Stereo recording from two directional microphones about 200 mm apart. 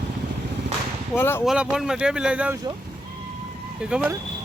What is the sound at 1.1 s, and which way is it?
Speech, 10° left (ahead or behind).